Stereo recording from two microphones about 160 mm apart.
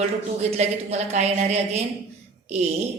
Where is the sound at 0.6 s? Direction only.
45° right (ahead or behind).